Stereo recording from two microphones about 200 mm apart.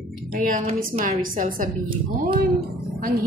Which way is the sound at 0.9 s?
45° right (ahead or behind).